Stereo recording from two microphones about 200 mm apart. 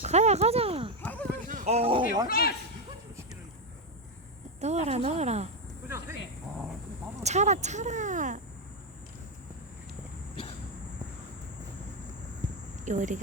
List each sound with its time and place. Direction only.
0.0 s speech: 35° right (ahead or behind)
1.0 s a sound: 5° left (ahead or behind)
1.5 s speech: 35° right (ahead or behind)
2.2 s speech: 50° left (ahead or behind)
4.6 s speech: 35° right (ahead or behind)
7.2 s speech: 35° right (ahead or behind)
12.8 s speech: 40° right (ahead or behind)